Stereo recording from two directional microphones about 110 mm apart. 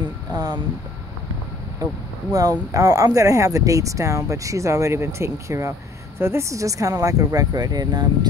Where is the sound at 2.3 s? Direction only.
35° right (ahead or behind).